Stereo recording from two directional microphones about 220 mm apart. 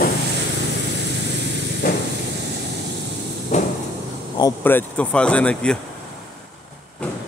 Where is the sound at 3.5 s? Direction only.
30° left (ahead or behind).